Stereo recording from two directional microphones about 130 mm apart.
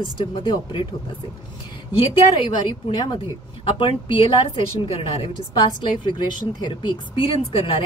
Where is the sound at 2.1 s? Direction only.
35° left (ahead or behind).